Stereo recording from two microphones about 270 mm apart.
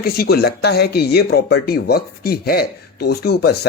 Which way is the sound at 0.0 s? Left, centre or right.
Left.